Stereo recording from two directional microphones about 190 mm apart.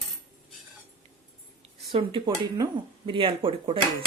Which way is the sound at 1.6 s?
30° right (ahead or behind).